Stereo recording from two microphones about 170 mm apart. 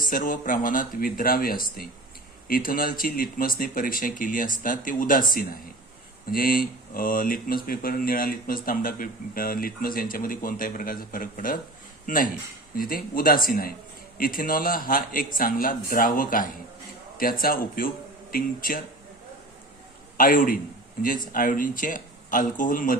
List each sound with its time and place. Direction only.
0.1 s speech: 55° left (ahead or behind)
20.1 s speech: 55° left (ahead or behind)